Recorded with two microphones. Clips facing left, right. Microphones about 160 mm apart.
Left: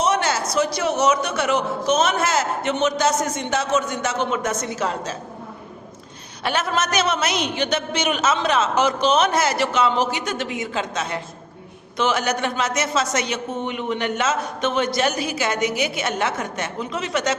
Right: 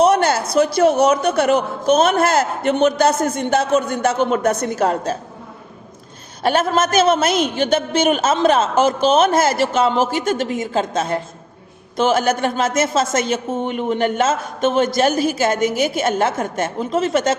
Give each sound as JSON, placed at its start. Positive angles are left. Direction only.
{"t": 0.0, "sound": "a woman's voice", "side_deg": -55}
{"t": 6.4, "sound": "a woman's voice", "side_deg": -45}